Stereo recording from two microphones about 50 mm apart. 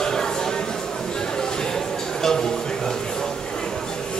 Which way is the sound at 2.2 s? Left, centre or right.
Centre.